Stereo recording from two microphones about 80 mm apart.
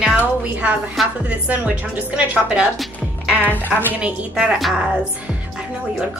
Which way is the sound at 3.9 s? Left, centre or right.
Centre.